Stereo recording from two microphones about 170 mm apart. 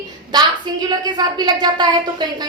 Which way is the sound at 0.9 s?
25° right (ahead or behind).